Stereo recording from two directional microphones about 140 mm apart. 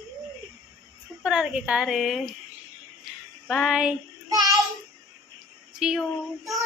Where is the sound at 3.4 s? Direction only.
Centre (ahead or behind).